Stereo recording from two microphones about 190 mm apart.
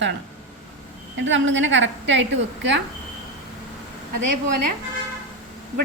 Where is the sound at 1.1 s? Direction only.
80° right.